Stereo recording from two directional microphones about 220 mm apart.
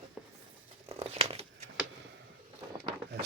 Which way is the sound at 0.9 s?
30° right (ahead or behind).